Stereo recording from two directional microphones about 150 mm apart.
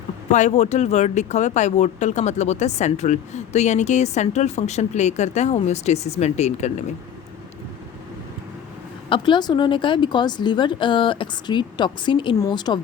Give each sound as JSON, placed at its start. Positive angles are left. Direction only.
{"t": 0.3, "sound": "speech", "side_deg": 50}
{"t": 9.0, "sound": "a woman's voice", "side_deg": 35}